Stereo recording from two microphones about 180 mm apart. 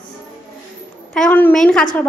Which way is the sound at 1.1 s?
5° left (ahead or behind).